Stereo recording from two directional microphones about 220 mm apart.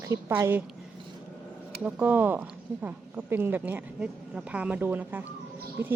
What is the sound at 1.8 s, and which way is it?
Speech, 10° right (ahead or behind).